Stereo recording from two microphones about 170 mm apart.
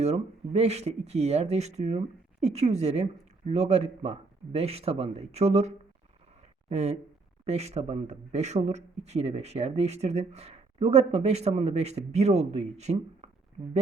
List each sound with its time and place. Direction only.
0.0 s speech: 40° right (ahead or behind)